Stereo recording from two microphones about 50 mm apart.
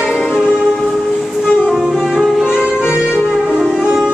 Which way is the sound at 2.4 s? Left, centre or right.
Right.